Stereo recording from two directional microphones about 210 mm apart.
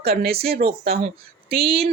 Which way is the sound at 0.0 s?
50° right (ahead or behind).